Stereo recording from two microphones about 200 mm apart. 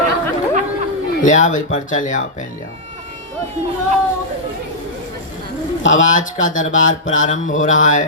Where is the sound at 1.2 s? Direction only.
40° left (ahead or behind).